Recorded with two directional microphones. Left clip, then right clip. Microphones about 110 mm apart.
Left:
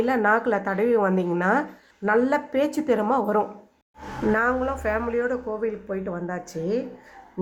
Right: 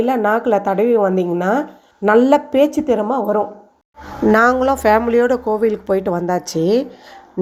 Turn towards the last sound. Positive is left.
turn(degrees=-50)  # may be behind; listen again after turning